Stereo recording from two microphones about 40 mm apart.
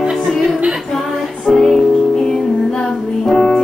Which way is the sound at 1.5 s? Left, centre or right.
Centre.